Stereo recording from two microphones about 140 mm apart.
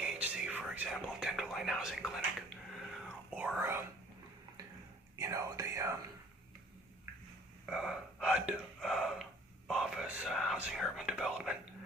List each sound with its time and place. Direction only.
0.0 s whispering: 5° right (ahead or behind)
3.3 s whispering: 10° right (ahead or behind)
5.1 s whispering: 20° right (ahead or behind)
7.7 s a sound: 5° right (ahead or behind)
9.6 s whispering: 5° right (ahead or behind)